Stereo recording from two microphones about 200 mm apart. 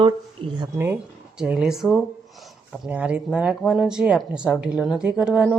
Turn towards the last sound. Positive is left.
turn(degrees=0)  # may be behind; listen again after turning